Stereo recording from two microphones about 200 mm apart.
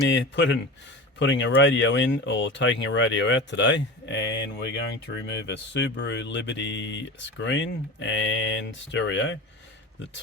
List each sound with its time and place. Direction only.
0.1 s speech: 65° left (ahead or behind)